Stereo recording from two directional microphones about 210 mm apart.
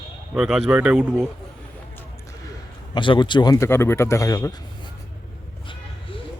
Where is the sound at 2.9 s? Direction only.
20° left (ahead or behind).